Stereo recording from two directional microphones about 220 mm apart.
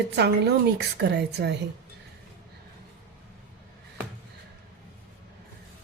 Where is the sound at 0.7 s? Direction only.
50° right (ahead or behind).